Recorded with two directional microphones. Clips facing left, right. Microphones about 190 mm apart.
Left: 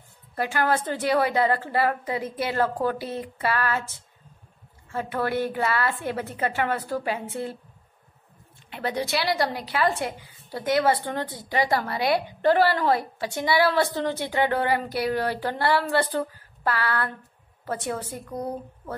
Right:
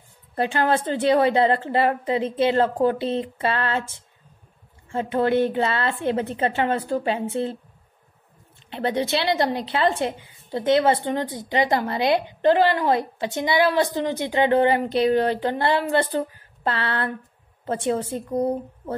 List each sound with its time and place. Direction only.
0.4 s a woman's voice: 25° right (ahead or behind)
8.6 s a woman's voice: 25° right (ahead or behind)